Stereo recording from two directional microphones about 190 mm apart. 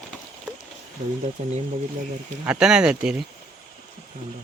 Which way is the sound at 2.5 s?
5° right (ahead or behind).